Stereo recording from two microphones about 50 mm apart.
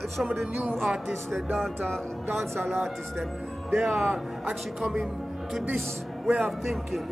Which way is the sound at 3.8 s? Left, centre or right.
Centre.